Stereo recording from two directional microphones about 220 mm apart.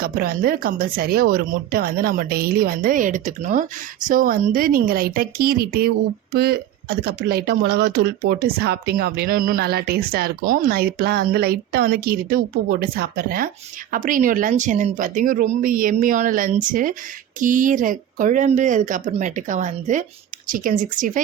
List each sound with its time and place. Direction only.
0.0 s speech: 45° right (ahead or behind)